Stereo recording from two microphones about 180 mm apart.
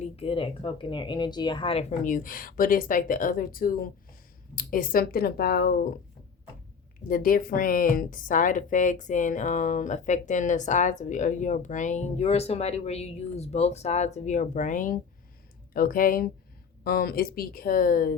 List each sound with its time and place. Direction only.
0.0 s speech: 30° left (ahead or behind)
2.0 s a woman's voice: 50° left (ahead or behind)
7.1 s a woman's voice: 50° left (ahead or behind)